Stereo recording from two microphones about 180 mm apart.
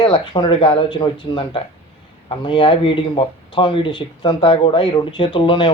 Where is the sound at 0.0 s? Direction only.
25° left (ahead or behind).